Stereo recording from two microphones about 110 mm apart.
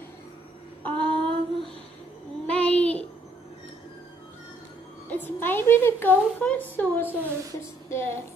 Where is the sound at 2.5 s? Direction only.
10° left (ahead or behind).